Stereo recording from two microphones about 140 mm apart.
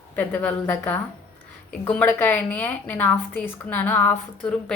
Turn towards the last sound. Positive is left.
turn(degrees=5)  # may be behind; listen again after turning